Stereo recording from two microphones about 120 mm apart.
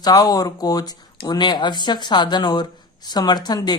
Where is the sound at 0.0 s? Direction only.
30° left (ahead or behind).